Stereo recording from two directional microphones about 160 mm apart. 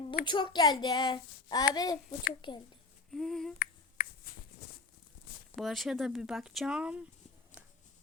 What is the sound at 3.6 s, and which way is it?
Finger snapping, 65° left (ahead or behind).